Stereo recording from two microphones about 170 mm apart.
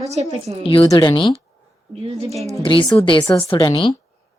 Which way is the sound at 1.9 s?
35° right (ahead or behind).